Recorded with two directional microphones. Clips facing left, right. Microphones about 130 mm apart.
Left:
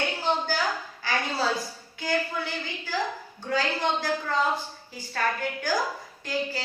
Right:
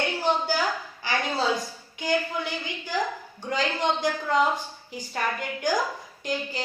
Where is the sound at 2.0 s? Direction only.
20° right (ahead or behind).